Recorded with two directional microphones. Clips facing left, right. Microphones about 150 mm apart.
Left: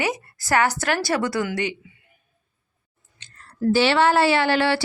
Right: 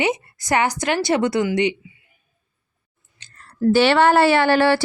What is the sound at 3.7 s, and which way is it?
Speech, 55° right (ahead or behind).